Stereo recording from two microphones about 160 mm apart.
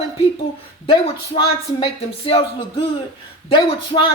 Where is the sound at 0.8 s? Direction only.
35° left (ahead or behind).